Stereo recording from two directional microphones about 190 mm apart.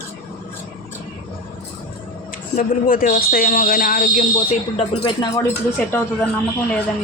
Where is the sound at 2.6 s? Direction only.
45° left (ahead or behind).